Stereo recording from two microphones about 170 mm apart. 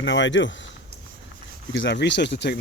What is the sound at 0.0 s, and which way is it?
Speech, 90° left.